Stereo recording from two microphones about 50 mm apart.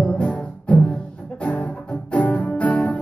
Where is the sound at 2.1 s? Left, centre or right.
Left.